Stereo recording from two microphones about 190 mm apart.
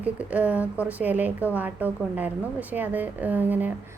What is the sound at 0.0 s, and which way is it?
A woman's voice, 5° right (ahead or behind).